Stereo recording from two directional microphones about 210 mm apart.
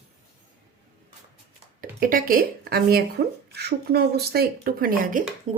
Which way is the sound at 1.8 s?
40° right (ahead or behind).